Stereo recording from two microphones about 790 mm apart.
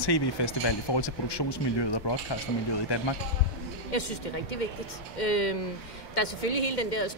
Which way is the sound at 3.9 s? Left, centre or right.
Left.